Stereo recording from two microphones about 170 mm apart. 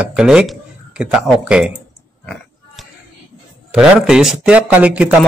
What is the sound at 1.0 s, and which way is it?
Speech, 5° right (ahead or behind).